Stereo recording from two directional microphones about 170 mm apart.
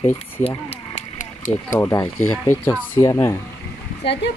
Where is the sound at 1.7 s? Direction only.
15° left (ahead or behind).